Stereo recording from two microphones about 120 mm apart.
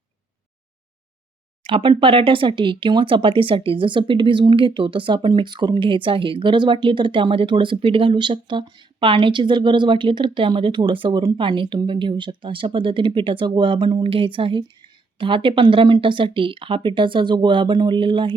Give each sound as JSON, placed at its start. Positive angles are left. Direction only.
{"t": 1.6, "sound": "speech", "side_deg": -45}